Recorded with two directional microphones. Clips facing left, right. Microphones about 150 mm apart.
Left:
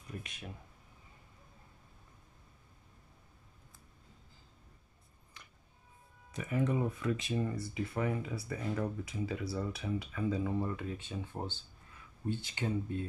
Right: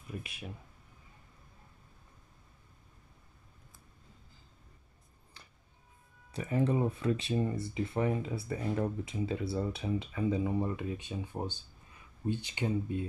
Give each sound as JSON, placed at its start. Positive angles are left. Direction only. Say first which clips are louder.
{"t": 0.2, "sound": "speech", "louder": "right 2 dB", "side_deg": -5}
{"t": 5.4, "sound": "music", "louder": "even", "side_deg": -35}
{"t": 6.3, "sound": "speech", "louder": "right 3 dB", "side_deg": -30}